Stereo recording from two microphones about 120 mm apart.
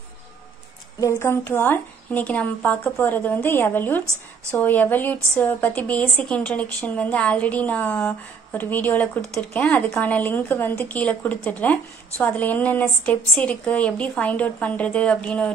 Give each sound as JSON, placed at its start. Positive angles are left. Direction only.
{"t": 1.0, "sound": "a woman's voice", "side_deg": 20}